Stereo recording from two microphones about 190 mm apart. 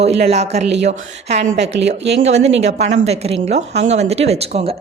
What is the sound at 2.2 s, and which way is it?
A woman's voice, 35° right (ahead or behind).